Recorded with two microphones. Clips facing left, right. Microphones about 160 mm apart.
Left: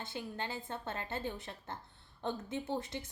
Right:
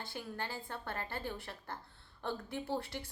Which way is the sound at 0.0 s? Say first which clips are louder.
Left 1 dB; 20° left (ahead or behind).